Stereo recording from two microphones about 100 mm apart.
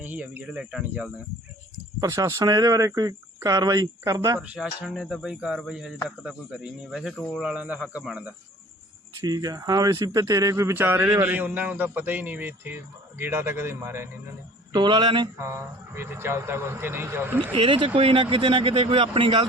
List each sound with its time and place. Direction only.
0.0 s speech: 15° right (ahead or behind)
2.0 s speech: 30° right (ahead or behind)
4.4 s speech: 15° right (ahead or behind)
9.2 s speech: 40° right (ahead or behind)
14.7 s speech: 45° right (ahead or behind)
15.4 s speech: 25° right (ahead or behind)
17.5 s speech: 60° right (ahead or behind)